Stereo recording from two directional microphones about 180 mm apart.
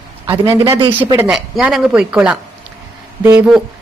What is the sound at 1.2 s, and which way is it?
A woman's voice, 5° right (ahead or behind).